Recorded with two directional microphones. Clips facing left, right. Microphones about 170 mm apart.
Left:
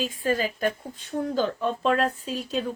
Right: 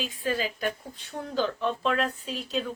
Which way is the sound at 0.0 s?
45° left (ahead or behind).